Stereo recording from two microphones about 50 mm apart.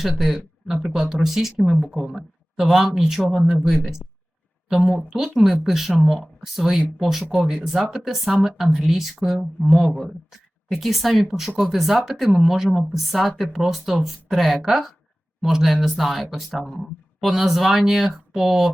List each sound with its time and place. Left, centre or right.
0.7 s speech: centre
9.6 s speech: left
10.7 s speech: centre
16.3 s speech: centre
16.6 s speech: centre
17.2 s speech: centre